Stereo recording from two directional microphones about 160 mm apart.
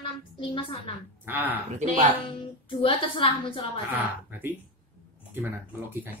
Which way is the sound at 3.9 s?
15° right (ahead or behind).